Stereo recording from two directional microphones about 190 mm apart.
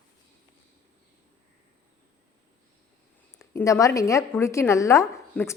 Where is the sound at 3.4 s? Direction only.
15° left (ahead or behind).